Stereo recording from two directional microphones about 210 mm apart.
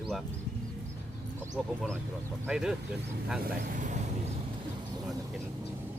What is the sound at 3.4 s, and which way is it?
Speech, 40° right (ahead or behind).